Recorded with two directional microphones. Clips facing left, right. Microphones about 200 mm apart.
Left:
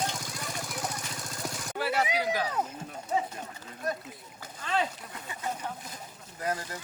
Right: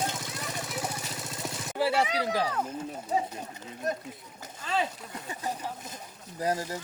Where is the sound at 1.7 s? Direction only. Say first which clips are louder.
Right 3 dB; 30° right (ahead or behind).